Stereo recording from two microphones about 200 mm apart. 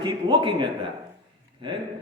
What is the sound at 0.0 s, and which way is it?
Speech, 25° right (ahead or behind).